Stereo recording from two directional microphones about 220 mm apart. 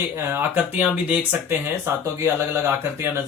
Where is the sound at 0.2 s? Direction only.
10° right (ahead or behind).